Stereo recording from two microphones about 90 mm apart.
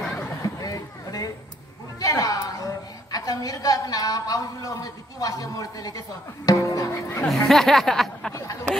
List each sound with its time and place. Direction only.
0.4 s a sound: 40° left (ahead or behind)
2.0 s a woman's voice: 40° left (ahead or behind)
7.2 s speech: 5° left (ahead or behind)
8.3 s speech: 30° left (ahead or behind)